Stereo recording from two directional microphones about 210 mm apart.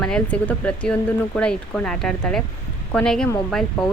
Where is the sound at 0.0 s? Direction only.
5° left (ahead or behind).